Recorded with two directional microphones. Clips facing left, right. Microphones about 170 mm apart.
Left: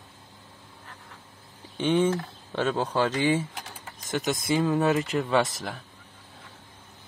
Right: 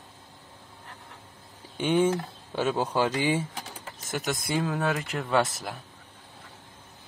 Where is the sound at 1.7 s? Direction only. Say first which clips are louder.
Even; 10° right (ahead or behind).